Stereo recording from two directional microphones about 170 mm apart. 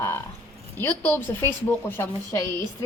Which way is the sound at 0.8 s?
10° left (ahead or behind).